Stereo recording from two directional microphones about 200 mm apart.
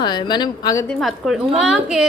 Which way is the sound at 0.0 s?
20° left (ahead or behind).